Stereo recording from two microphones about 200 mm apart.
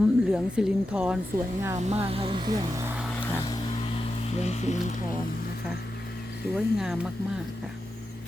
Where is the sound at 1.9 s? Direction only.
30° right (ahead or behind).